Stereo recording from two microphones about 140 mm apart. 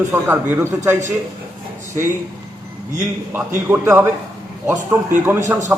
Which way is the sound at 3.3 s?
15° right (ahead or behind).